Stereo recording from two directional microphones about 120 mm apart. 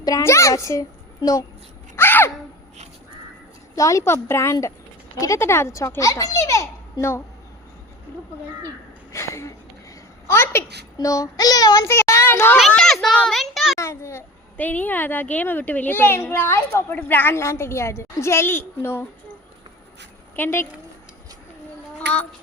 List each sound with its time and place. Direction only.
0.0 s a child's voice: 25° left (ahead or behind)
2.0 s a sound: 20° left (ahead or behind)
3.8 s a woman's voice: 25° left (ahead or behind)
9.1 s a woman's voice: 25° left (ahead or behind)
10.9 s child singing: 30° left (ahead or behind)
11.9 s child singing: 20° left (ahead or behind)
12.5 s a child's voice: 5° left (ahead or behind)
13.2 s a sound: centre (ahead or behind)
13.7 s a sound: 25° left (ahead or behind)
14.5 s a child's voice: 15° left (ahead or behind)
20.3 s speech: 20° left (ahead or behind)
21.9 s child singing: 10° left (ahead or behind)